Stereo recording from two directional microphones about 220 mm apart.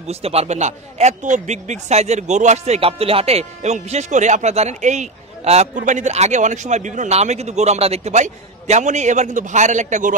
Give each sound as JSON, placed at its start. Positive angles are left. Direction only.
{"t": 0.1, "sound": "a man's voice", "side_deg": -30}